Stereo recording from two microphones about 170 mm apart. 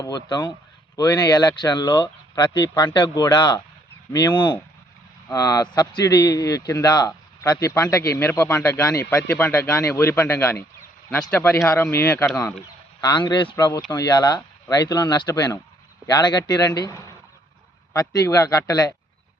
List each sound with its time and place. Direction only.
0.0 s speech: 25° left (ahead or behind)